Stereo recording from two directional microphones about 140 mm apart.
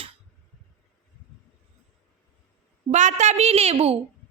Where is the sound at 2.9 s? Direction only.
60° right (ahead or behind).